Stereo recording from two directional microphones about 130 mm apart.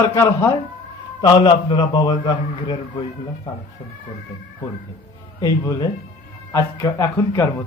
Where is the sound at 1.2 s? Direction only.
40° left (ahead or behind).